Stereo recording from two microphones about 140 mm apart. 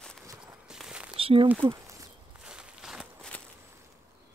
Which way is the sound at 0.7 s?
5° right (ahead or behind).